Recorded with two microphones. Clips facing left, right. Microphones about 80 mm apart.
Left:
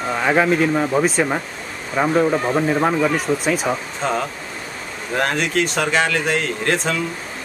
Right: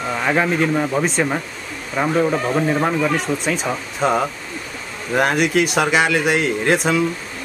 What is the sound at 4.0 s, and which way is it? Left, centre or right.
A man's voice, centre.